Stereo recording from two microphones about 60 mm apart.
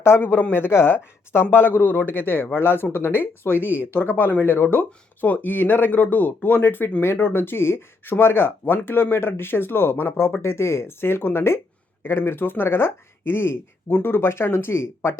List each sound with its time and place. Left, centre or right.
0.0 s speech: left